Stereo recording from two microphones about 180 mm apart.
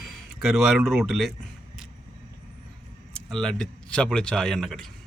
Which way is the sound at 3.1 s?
5° left (ahead or behind).